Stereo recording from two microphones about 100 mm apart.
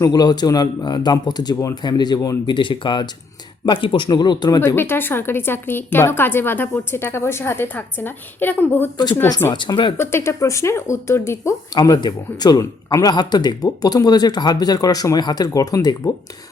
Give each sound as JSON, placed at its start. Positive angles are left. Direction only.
{"t": 0.0, "sound": "speech", "side_deg": 45}
{"t": 2.5, "sound": "speech", "side_deg": 55}
{"t": 4.6, "sound": "a woman's voice", "side_deg": 25}
{"t": 9.5, "sound": "speech", "side_deg": 50}
{"t": 10.0, "sound": "a woman's voice", "side_deg": 25}
{"t": 11.7, "sound": "speech", "side_deg": 45}